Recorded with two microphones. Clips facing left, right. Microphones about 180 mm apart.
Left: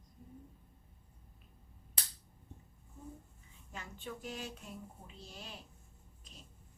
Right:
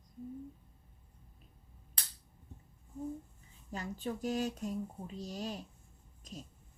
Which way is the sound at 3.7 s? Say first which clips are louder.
Right 7 dB; 35° right (ahead or behind).